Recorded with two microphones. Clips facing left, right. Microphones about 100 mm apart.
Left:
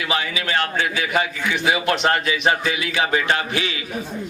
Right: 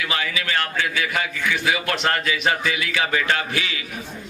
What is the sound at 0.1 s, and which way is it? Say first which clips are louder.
A man's voice: left 5 dB; 20° left (ahead or behind).